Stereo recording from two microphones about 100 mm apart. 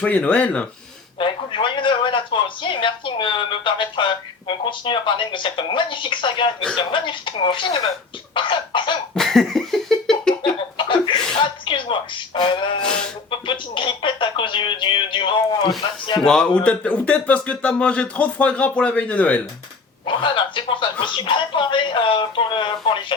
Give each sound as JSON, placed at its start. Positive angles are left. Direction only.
{"t": 0.0, "sound": "speech", "side_deg": 10}
{"t": 1.2, "sound": "speech", "side_deg": 55}
{"t": 8.3, "sound": "cough", "side_deg": 55}
{"t": 9.1, "sound": "laughter", "side_deg": 5}
{"t": 10.4, "sound": "chuckle", "side_deg": 55}
{"t": 13.4, "sound": "speech", "side_deg": 55}
{"t": 16.2, "sound": "speech", "side_deg": 5}
{"t": 20.1, "sound": "speech", "side_deg": 55}